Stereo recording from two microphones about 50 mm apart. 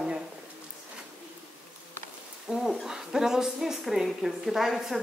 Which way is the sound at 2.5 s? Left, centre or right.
Centre.